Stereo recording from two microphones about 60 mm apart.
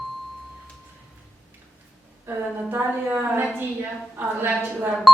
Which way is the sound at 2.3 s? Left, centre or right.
Right.